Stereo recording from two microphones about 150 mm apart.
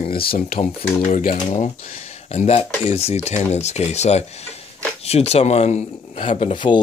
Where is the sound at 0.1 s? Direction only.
85° left.